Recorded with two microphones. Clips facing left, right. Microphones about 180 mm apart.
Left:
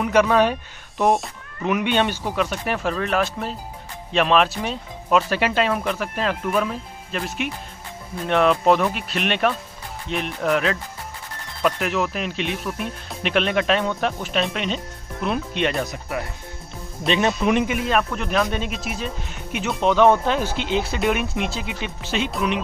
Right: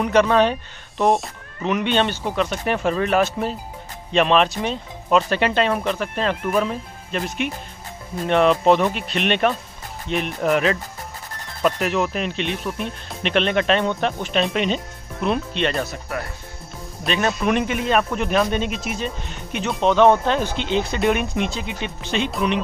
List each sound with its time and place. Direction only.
0.0 s speech: 10° left (ahead or behind)
15.8 s speech: 15° left (ahead or behind)
17.5 s speech: 15° left (ahead or behind)
17.7 s speech: centre (ahead or behind)